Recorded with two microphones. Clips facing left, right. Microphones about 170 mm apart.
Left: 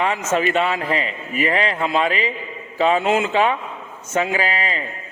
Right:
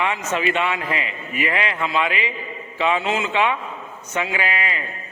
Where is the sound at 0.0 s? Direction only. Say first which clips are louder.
Left 3 dB; 40° left (ahead or behind).